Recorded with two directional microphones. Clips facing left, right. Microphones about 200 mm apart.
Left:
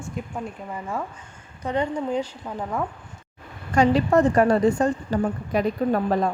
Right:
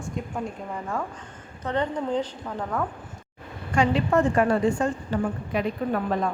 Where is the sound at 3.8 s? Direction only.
40° left (ahead or behind).